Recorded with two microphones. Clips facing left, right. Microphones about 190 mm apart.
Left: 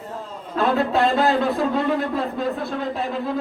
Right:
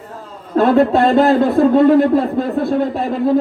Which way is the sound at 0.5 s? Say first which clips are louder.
Right 8 dB; 40° right (ahead or behind).